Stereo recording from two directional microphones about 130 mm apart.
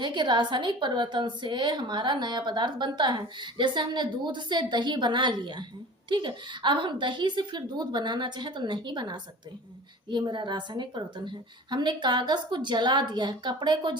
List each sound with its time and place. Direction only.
0.0 s a woman's voice: 35° right (ahead or behind)